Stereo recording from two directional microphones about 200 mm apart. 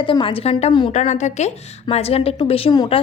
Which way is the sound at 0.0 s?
25° left (ahead or behind).